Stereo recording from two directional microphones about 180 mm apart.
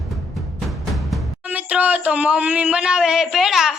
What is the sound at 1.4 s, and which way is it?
Speech, 10° right (ahead or behind).